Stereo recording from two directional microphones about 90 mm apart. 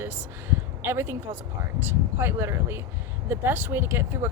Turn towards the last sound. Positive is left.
turn(degrees=-30)  # may be behind; listen again after turning